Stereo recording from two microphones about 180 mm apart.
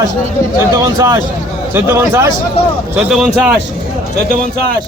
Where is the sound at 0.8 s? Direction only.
20° right (ahead or behind).